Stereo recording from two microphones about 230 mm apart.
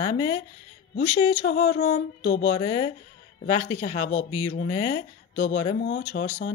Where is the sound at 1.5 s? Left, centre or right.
Left.